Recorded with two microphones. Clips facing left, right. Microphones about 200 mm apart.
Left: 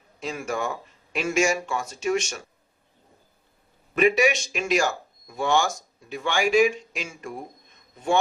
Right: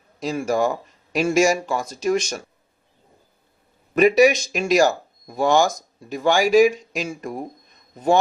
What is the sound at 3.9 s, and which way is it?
Speech, 40° right (ahead or behind).